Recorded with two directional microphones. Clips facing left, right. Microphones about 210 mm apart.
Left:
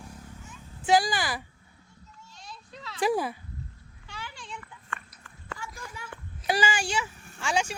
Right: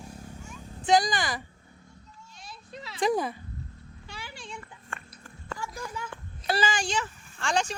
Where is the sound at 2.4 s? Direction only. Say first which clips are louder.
Right 2 dB; 10° right (ahead or behind).